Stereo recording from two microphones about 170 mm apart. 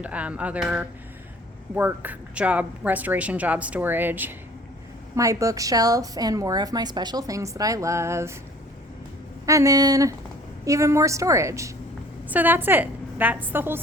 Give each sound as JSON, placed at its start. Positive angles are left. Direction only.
{"t": 0.0, "sound": "a woman's voice", "side_deg": -5}
{"t": 9.5, "sound": "a woman's voice", "side_deg": -20}